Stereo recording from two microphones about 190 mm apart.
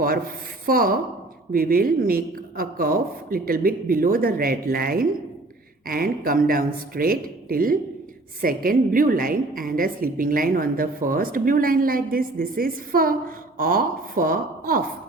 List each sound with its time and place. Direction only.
0.6 s a woman's voice: 50° right (ahead or behind)